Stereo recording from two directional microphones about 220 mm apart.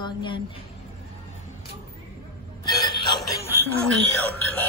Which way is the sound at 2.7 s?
15° left (ahead or behind).